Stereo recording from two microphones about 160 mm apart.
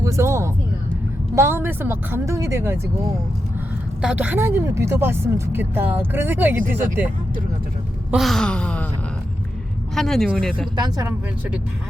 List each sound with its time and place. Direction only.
0.0 s speech: 20° right (ahead or behind)
4.0 s speech: 10° right (ahead or behind)
8.1 s a sound: centre (ahead or behind)
9.9 s speech: centre (ahead or behind)
10.8 s speech: 25° right (ahead or behind)